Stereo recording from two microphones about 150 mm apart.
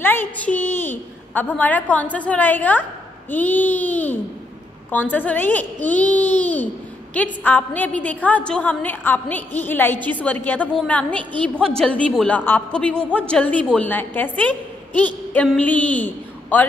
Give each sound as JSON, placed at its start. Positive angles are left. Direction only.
{"t": 0.0, "sound": "a woman's voice", "side_deg": 10}